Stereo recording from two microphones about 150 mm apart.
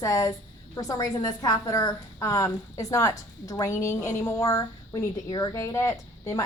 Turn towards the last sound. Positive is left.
turn(degrees=20)  # may be behind; listen again after turning